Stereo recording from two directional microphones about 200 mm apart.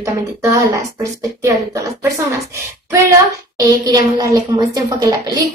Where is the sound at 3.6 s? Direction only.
20° right (ahead or behind).